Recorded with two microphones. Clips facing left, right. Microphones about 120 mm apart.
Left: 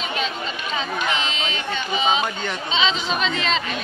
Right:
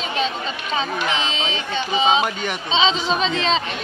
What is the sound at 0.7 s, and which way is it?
Speech, 30° right (ahead or behind).